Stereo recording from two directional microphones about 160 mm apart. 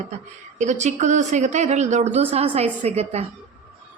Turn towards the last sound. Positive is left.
turn(degrees=-40)  # may be behind; listen again after turning